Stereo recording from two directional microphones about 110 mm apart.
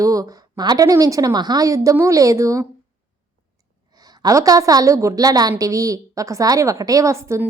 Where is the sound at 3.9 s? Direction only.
35° right (ahead or behind).